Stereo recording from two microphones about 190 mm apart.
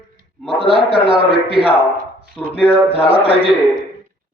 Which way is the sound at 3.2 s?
30° right (ahead or behind).